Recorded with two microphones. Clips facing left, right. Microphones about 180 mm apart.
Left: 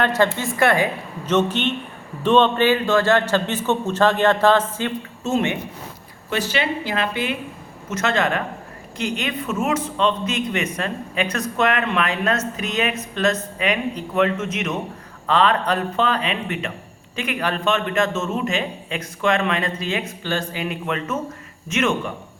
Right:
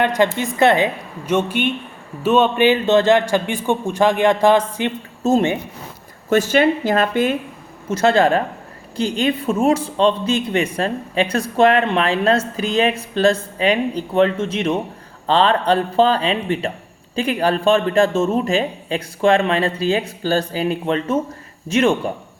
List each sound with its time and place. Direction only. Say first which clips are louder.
0.0 s a man's voice: right 2 dB; 15° right (ahead or behind)
1.2 s a man's voice: right 1 dB; 10° right (ahead or behind)
5.2 s speech: right 5 dB; 35° right (ahead or behind)
6.3 s speech: right 8 dB; 50° right (ahead or behind)
7.9 s speech: right 7 dB; 35° right (ahead or behind)